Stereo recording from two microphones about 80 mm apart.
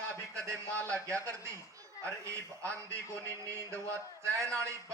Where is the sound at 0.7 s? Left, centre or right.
Centre.